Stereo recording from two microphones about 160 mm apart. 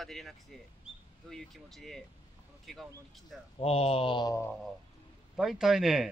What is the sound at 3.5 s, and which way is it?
Speech, 35° left (ahead or behind).